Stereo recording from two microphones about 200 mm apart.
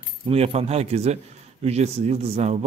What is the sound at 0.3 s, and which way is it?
A man's voice, 30° right (ahead or behind).